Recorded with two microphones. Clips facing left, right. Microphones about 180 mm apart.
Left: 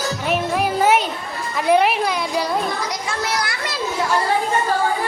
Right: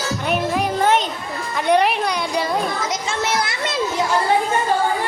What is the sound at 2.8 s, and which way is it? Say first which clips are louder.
Children playing: right 2 dB; 25° right (ahead or behind).